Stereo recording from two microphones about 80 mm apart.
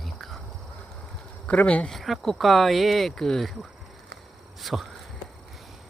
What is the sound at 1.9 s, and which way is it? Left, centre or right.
Speech, centre.